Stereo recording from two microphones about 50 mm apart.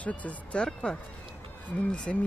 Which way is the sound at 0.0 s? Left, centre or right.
Left.